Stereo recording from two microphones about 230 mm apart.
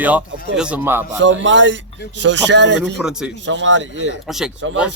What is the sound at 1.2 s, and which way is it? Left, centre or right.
Speech, right.